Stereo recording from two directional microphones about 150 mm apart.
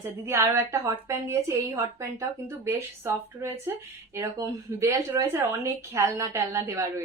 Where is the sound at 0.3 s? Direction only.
20° right (ahead or behind).